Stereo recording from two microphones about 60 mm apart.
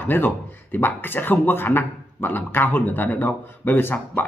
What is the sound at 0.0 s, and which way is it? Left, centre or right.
Speech, left.